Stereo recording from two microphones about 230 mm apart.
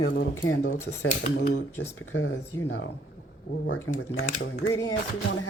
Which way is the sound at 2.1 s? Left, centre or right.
Left.